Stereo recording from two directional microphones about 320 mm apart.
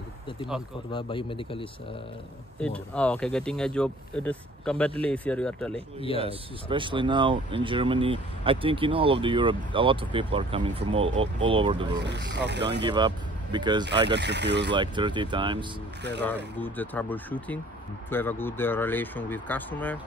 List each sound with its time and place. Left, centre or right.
0.9 s speech: centre
2.6 s speech: centre
5.9 s speech: centre
6.2 s speech: centre
12.0 s speech: right
12.8 s speech: centre
14.1 s speech: right
14.7 s speech: centre
16.5 s speech: centre